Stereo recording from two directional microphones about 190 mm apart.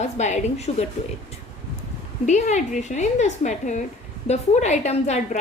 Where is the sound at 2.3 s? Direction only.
40° left (ahead or behind).